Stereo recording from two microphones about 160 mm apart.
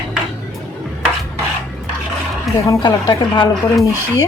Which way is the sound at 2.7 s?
25° left (ahead or behind).